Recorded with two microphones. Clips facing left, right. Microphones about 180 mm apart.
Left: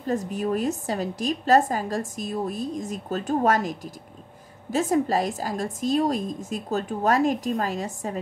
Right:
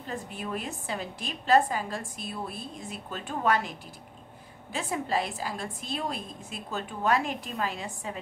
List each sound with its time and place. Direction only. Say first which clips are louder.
0.0 s a woman's voice: left 10 dB; 40° left (ahead or behind)